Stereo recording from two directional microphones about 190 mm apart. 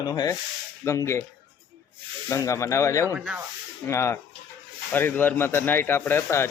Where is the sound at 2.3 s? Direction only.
15° left (ahead or behind).